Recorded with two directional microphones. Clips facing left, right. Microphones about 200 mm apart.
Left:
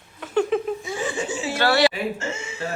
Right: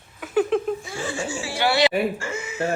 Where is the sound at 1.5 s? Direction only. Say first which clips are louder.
Left 1 dB; 15° right (ahead or behind).